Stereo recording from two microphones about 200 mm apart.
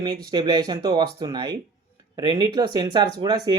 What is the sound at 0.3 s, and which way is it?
Speech, 20° right (ahead or behind).